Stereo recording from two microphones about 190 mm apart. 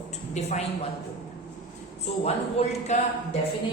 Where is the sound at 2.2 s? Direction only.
35° left (ahead or behind).